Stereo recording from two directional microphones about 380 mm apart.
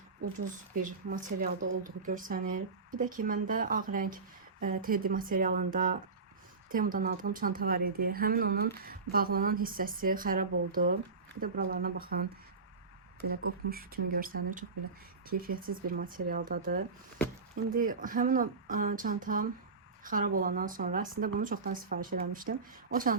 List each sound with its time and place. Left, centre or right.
0.3 s speech: right
13.3 s speech: right